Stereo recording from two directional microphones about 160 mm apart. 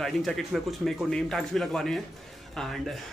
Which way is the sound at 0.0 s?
Centre (ahead or behind).